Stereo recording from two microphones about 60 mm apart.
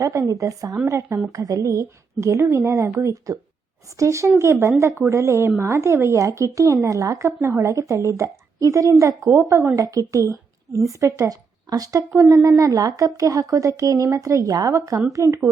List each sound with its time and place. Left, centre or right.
0.0 s a woman's voice: right
0.9 s a woman's voice: right
6.2 s a woman's voice: right
7.3 s a woman's voice: right
9.7 s speech: right
12.1 s a woman's voice: right